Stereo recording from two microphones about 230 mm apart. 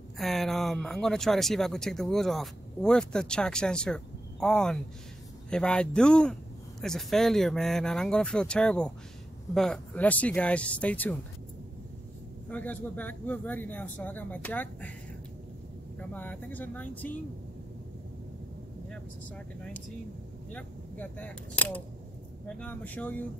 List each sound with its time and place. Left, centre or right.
0.2 s speech: centre
12.4 s speech: centre
16.0 s speech: centre
18.9 s speech: centre